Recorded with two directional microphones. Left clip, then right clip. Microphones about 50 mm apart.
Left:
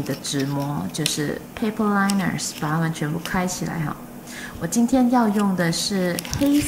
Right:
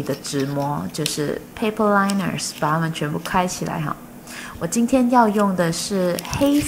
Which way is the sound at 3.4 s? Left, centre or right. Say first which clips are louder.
Right 6 dB; right.